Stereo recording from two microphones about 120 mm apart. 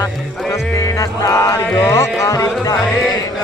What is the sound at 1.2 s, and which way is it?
Music, 30° left (ahead or behind).